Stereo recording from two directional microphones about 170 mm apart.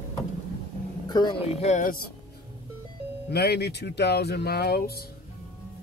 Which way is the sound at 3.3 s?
75° left (ahead or behind).